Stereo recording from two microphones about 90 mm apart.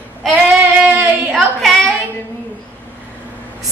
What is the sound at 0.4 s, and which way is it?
Singing, 20° right (ahead or behind).